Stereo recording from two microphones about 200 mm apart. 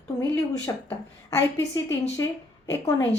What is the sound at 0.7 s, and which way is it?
A woman's voice, 15° left (ahead or behind).